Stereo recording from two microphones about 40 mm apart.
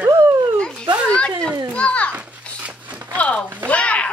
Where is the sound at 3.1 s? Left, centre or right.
Left.